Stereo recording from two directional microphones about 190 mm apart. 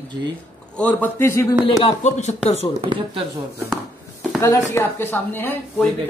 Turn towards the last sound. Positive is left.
turn(degrees=10)  # may be behind; listen again after turning